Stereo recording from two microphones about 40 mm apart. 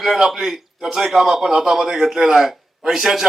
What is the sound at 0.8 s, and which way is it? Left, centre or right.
A man's voice, centre.